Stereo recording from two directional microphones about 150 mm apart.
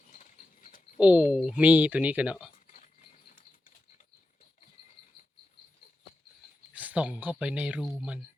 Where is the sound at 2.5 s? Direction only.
60° left (ahead or behind).